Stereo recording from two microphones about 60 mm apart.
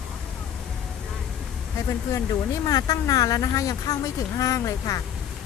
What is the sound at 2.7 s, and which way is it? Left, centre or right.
Speech, left.